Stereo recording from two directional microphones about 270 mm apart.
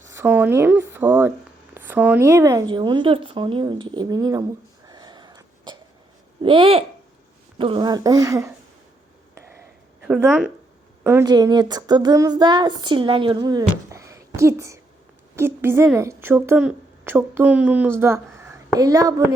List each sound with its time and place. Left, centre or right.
0.1 s a woman's voice: centre
4.9 s wheeze: centre
6.4 s a child's voice: centre
10.1 s a woman's voice: centre